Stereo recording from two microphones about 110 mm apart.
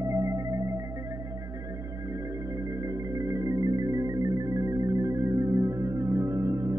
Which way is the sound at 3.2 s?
30° right (ahead or behind).